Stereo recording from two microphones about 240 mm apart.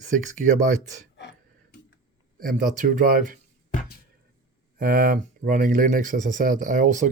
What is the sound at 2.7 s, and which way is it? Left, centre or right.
Speech, right.